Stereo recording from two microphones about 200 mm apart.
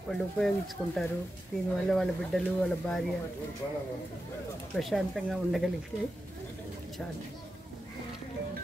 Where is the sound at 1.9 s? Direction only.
Centre (ahead or behind).